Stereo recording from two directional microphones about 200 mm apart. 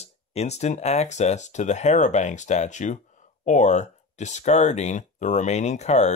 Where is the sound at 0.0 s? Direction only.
35° left (ahead or behind).